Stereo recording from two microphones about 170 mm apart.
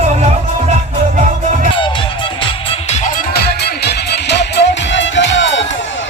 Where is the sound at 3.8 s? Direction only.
85° left.